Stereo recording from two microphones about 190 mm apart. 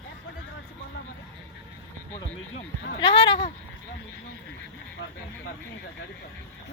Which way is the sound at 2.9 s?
25° left (ahead or behind).